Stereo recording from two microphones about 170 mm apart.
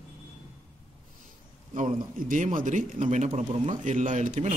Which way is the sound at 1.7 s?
45° right (ahead or behind).